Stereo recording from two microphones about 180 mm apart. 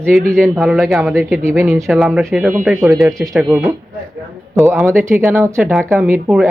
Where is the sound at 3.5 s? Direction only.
10° right (ahead or behind).